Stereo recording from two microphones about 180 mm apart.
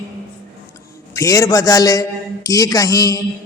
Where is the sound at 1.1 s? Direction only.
20° left (ahead or behind).